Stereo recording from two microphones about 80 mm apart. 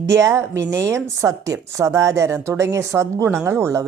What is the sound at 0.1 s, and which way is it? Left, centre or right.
Speech, right.